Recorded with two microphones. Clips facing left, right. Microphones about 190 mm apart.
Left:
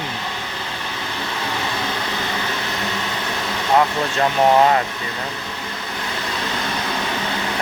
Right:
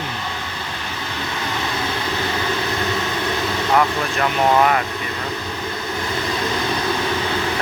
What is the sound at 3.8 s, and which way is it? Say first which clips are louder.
Speech: left 1 dB; 25° left (ahead or behind).